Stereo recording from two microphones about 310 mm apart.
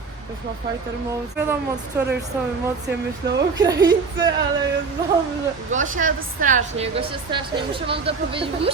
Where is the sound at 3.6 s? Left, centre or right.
Centre.